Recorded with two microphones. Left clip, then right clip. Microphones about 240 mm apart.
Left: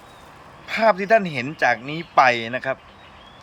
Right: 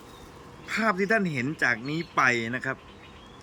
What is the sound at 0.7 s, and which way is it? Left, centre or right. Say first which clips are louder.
Speech: left 8 dB; centre.